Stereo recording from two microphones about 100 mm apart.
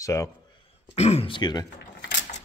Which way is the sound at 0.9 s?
90° left.